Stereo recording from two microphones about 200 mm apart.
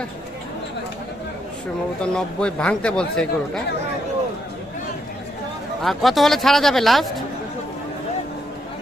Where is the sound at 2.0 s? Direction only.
5° left (ahead or behind).